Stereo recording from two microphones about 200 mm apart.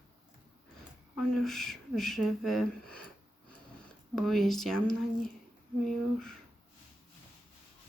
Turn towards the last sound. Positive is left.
turn(degrees=5)  # may be behind; listen again after turning